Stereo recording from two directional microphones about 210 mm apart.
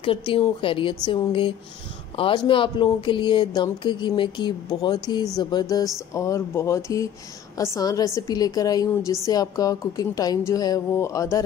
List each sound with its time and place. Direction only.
0.3 s a woman's voice: 25° left (ahead or behind)